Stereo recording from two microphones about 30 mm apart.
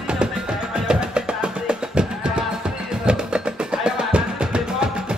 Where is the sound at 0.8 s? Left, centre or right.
Right.